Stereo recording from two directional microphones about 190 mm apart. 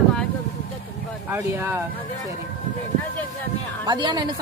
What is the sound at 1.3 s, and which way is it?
Speech, 15° right (ahead or behind).